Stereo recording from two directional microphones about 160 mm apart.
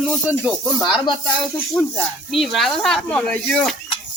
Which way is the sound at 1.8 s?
Centre (ahead or behind).